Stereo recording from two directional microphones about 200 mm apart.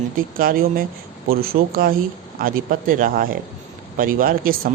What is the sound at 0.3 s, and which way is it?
Speech, 45° right (ahead or behind).